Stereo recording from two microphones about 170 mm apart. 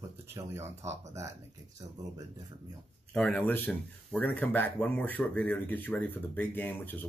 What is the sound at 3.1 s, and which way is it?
Speech, 5° left (ahead or behind).